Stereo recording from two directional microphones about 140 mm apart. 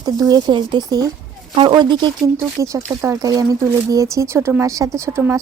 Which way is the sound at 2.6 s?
20° right (ahead or behind).